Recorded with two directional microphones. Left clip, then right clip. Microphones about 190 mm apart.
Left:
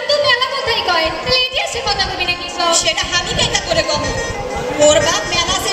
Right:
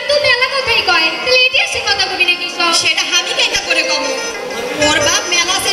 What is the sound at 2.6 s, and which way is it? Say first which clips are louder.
A woman's voice: even; 60° left (ahead or behind).